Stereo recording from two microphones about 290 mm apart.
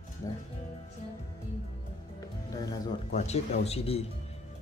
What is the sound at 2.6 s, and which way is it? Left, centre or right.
A man's voice, centre.